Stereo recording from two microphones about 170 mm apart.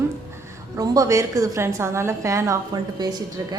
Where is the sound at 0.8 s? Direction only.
20° right (ahead or behind).